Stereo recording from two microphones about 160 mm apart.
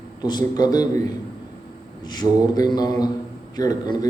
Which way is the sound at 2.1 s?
25° left (ahead or behind).